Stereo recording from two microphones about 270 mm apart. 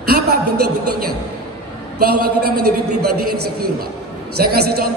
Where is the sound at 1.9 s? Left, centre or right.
Right.